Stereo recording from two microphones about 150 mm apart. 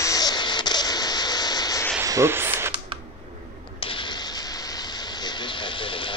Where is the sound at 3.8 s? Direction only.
35° left (ahead or behind).